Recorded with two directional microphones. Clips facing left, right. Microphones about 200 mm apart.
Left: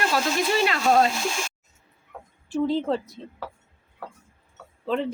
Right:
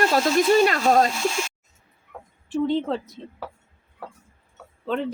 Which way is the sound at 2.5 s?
Centre (ahead or behind).